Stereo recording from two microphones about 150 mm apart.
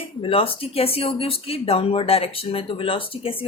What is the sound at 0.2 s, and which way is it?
Speech, 40° left (ahead or behind).